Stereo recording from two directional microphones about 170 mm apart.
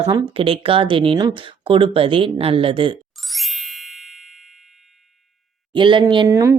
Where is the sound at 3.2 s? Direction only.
Centre (ahead or behind).